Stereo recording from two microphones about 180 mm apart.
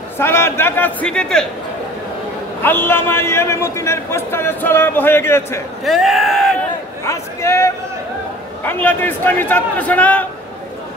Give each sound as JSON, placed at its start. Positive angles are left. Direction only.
{"t": 0.2, "sound": "a man's voice", "side_deg": 15}
{"t": 2.6, "sound": "a man's voice", "side_deg": 10}
{"t": 5.9, "sound": "speech", "side_deg": 0}
{"t": 7.1, "sound": "a man's voice", "side_deg": 15}